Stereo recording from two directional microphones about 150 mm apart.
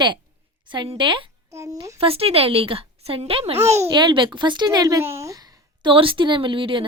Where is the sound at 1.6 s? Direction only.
20° right (ahead or behind).